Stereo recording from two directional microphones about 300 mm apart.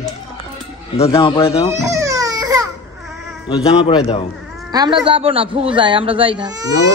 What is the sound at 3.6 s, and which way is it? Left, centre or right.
Speech, centre.